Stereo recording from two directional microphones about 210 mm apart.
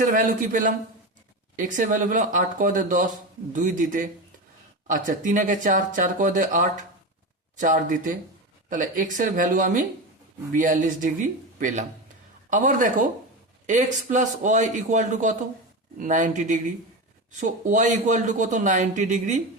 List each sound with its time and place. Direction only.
0.0 s a man's voice: 40° right (ahead or behind)